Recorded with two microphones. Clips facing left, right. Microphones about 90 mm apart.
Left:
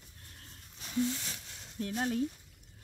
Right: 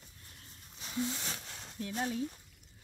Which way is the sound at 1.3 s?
55° right (ahead or behind).